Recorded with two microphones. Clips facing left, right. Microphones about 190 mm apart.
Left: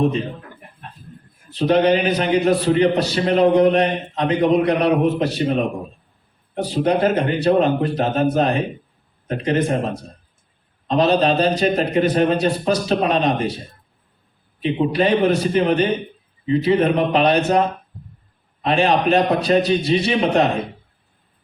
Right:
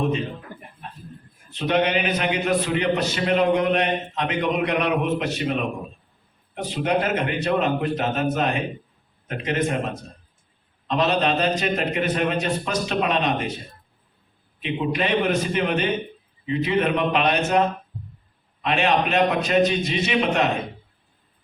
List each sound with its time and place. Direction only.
1.5 s a man's voice: 35° left (ahead or behind)
14.6 s a man's voice: 35° left (ahead or behind)
18.6 s a man's voice: 35° left (ahead or behind)